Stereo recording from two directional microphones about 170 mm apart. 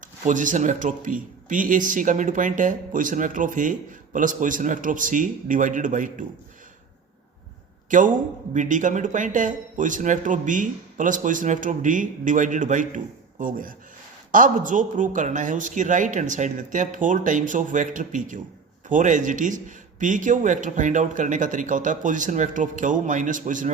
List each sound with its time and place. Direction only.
0.3 s speech: 45° right (ahead or behind)
7.9 s speech: 50° right (ahead or behind)